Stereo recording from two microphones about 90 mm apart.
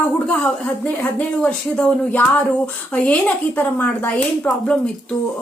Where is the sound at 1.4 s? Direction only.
15° left (ahead or behind).